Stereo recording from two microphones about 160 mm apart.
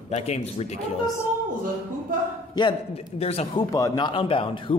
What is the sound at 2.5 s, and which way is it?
Speech, 35° left (ahead or behind).